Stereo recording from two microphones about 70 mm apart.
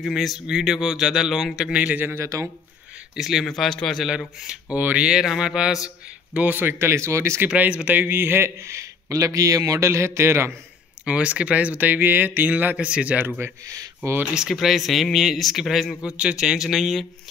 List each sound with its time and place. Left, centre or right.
0.0 s speech: centre
2.0 s a man's voice: right
2.2 s speech: right
3.2 s speech: centre
3.4 s speech: centre
4.7 s a man's voice: right
7.4 s a man's voice: right
11.1 s a man's voice: centre
13.7 s speech: right
14.2 s speech: centre
16.2 s speech: centre